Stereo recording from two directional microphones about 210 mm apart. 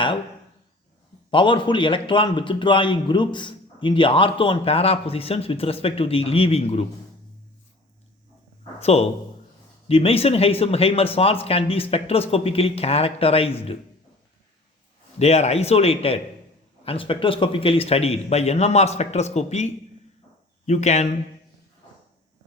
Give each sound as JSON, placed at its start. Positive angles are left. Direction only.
{"t": 1.3, "sound": "a man's voice", "side_deg": 25}
{"t": 8.8, "sound": "a man's voice", "side_deg": 30}
{"t": 15.2, "sound": "a man's voice", "side_deg": 30}